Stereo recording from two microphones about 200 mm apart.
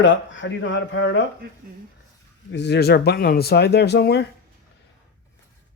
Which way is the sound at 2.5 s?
60° left (ahead or behind).